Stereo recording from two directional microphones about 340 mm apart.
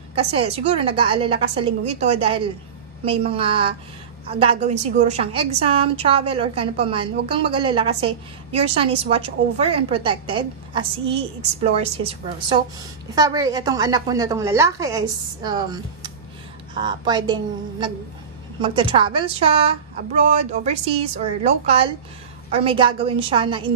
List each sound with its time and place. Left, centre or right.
0.1 s a woman's voice: centre